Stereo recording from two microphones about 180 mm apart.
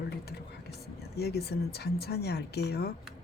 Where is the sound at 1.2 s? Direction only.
65° left (ahead or behind).